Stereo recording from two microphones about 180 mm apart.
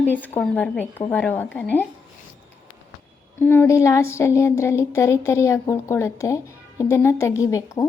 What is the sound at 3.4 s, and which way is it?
Speech, 15° left (ahead or behind).